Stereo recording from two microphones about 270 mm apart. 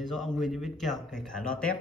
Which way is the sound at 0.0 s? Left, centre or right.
Centre.